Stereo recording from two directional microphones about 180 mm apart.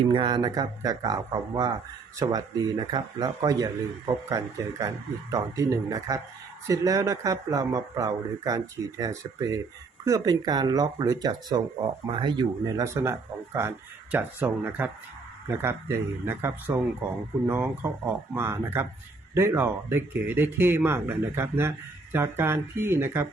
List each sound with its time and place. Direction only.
0.1 s a man's voice: 25° right (ahead or behind)